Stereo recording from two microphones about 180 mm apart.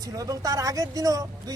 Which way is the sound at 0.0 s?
20° right (ahead or behind).